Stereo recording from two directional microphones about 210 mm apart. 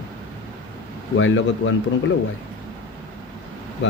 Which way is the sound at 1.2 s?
65° left (ahead or behind).